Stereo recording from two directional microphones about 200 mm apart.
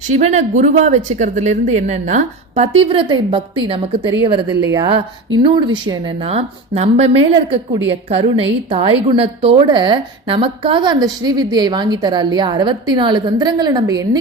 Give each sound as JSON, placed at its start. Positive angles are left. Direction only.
{"t": 0.1, "sound": "a woman's voice", "side_deg": -35}